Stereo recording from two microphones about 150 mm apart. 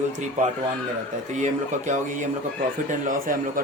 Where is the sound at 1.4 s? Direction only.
55° right (ahead or behind).